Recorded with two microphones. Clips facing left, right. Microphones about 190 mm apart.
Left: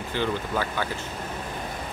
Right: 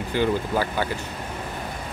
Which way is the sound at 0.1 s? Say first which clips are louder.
Right 4 dB; 10° right (ahead or behind).